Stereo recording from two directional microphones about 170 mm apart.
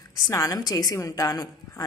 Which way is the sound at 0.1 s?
20° left (ahead or behind).